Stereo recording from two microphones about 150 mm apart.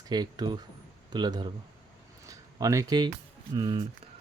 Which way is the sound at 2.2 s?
20° right (ahead or behind).